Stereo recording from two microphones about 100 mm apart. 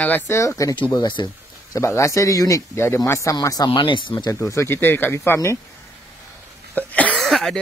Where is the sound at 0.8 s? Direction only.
45° left (ahead or behind).